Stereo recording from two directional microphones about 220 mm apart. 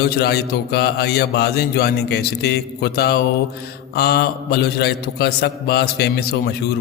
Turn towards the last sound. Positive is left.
turn(degrees=45)  # may be behind; listen again after turning